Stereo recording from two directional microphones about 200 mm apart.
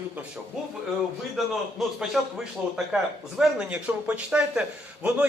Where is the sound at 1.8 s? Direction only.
Centre (ahead or behind).